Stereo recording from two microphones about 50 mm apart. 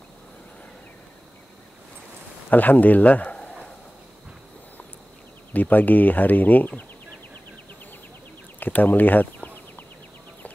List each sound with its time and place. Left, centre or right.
2.5 s speech: left
5.5 s speech: left
8.5 s a sound: left